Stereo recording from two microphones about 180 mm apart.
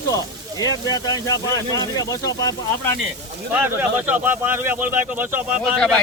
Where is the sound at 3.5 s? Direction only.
10° right (ahead or behind).